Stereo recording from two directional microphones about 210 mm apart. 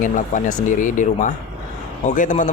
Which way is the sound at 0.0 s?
35° left (ahead or behind).